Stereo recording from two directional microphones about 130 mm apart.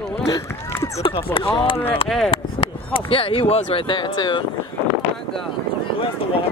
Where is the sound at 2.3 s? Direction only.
45° left (ahead or behind).